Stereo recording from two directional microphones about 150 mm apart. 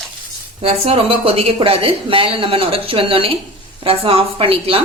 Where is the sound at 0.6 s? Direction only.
45° right (ahead or behind).